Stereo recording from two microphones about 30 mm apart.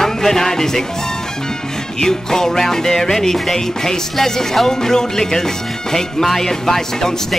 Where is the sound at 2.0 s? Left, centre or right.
Centre.